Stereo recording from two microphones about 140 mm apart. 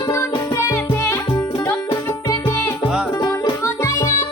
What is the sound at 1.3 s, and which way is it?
Music, 30° left (ahead or behind).